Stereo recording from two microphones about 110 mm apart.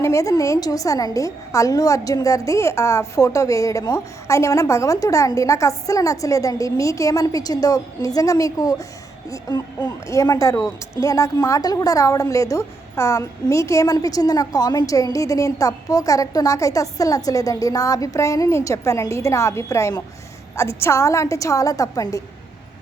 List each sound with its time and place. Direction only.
0.0 s a woman's voice: 25° left (ahead or behind)